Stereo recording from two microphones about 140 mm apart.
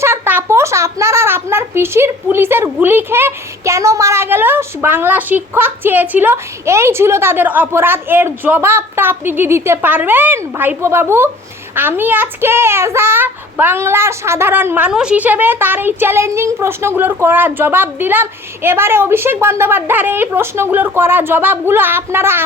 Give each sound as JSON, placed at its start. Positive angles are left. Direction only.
{"t": 0.0, "sound": "a child's voice", "side_deg": -15}